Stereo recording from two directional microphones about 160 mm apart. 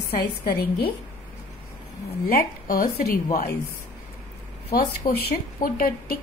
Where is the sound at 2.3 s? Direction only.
65° left (ahead or behind).